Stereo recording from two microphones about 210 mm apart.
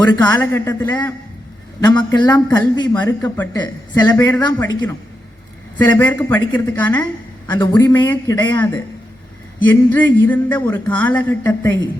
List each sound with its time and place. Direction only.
0.1 s a woman's voice: 20° left (ahead or behind)
3.2 s a woman's voice: 10° left (ahead or behind)
5.7 s speech: 10° left (ahead or behind)
7.0 s a woman's voice: 20° left (ahead or behind)
9.6 s speech: 10° left (ahead or behind)